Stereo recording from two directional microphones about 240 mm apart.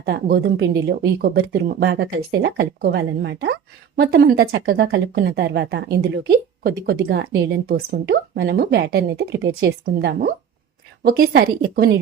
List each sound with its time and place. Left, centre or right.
0.0 s a woman's voice: right